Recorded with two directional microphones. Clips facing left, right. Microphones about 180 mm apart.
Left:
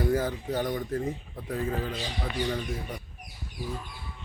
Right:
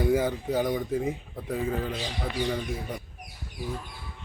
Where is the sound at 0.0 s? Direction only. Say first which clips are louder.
Right 2 dB; 10° right (ahead or behind).